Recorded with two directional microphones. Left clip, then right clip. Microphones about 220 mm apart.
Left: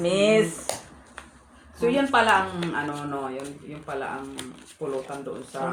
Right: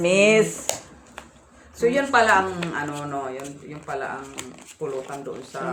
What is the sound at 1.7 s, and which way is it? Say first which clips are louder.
Speech: right 2 dB; 30° right (ahead or behind).